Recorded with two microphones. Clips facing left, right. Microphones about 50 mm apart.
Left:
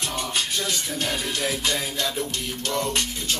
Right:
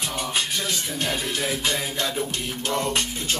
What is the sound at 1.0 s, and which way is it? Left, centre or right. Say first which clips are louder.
Music: right 1 dB; centre.